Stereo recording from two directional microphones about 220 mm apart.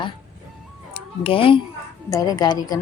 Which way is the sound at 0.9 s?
25° left (ahead or behind).